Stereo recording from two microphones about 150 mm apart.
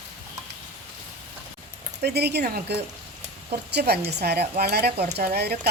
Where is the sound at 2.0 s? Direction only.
90° right.